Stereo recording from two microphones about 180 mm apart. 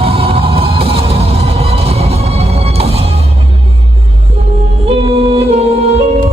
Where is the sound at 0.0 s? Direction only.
30° right (ahead or behind).